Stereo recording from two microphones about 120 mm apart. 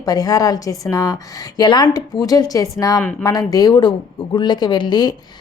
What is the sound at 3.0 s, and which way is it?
Speech, 10° left (ahead or behind).